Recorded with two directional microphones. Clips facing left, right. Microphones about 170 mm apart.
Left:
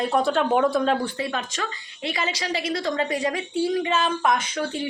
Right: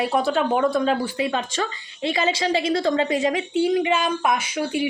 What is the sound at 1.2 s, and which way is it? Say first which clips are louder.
A woman's voice: right 4 dB; 25° right (ahead or behind).